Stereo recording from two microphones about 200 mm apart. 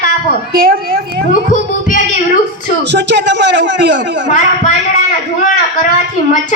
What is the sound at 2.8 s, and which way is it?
A man's voice, 60° right (ahead or behind).